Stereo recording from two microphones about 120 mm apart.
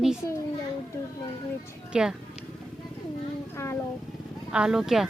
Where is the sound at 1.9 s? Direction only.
5° right (ahead or behind).